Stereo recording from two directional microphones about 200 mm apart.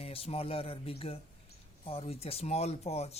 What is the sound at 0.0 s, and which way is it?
Speech, 30° left (ahead or behind).